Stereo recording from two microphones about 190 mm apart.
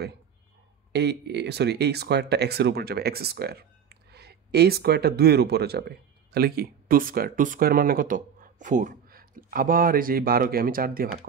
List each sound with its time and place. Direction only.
0.9 s speech: 60° right (ahead or behind)